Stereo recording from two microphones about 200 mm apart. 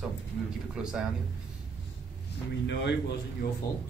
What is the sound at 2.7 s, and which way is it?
Speech, 60° left (ahead or behind).